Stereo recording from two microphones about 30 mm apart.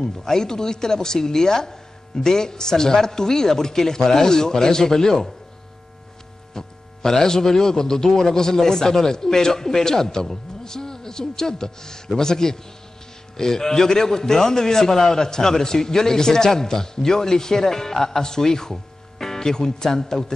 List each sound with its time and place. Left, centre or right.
0.0 s a man's voice: centre
6.5 s a man's voice: centre